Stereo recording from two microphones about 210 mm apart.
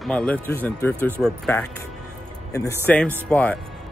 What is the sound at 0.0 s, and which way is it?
Speech, 5° left (ahead or behind).